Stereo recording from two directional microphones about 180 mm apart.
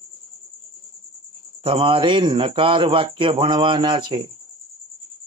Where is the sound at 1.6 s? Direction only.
30° right (ahead or behind).